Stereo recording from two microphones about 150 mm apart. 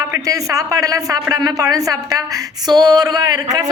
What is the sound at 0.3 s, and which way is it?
A woman's voice, 20° right (ahead or behind).